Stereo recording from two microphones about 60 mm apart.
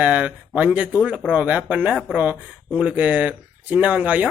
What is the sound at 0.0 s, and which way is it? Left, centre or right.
Speech, right.